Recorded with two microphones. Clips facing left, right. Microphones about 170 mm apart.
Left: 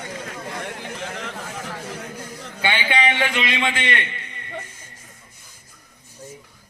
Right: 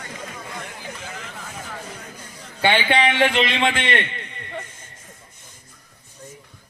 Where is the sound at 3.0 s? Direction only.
50° right (ahead or behind).